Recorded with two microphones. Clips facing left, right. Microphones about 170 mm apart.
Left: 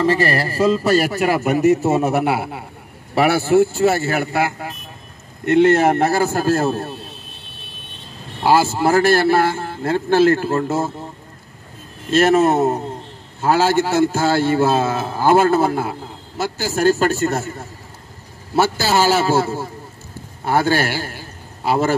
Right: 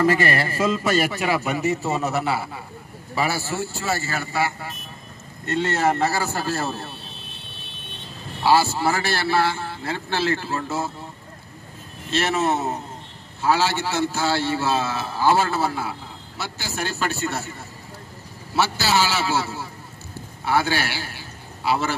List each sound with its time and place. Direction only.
0.0 s a man's voice: 30° left (ahead or behind); by 6.9 s 50° left (ahead or behind)
8.5 s a man's voice: 50° left (ahead or behind)
12.1 s a man's voice: 50° left (ahead or behind)